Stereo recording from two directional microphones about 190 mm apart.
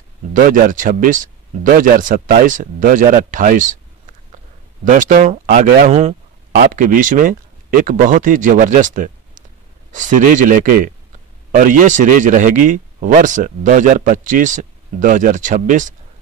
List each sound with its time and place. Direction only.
0.3 s speech: 45° right (ahead or behind)
4.8 s speech: 45° right (ahead or behind)